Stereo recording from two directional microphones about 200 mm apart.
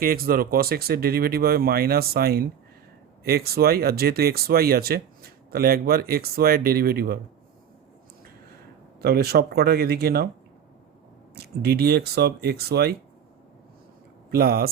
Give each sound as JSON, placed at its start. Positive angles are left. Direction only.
{"t": 0.0, "sound": "speech", "side_deg": -45}
{"t": 9.0, "sound": "speech", "side_deg": -50}
{"t": 11.3, "sound": "speech", "side_deg": -50}
{"t": 14.3, "sound": "speech", "side_deg": -50}